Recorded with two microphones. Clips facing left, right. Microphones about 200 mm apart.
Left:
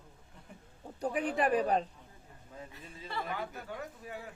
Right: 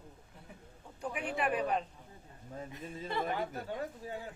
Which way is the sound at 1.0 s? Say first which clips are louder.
Left 5 dB; 35° left (ahead or behind).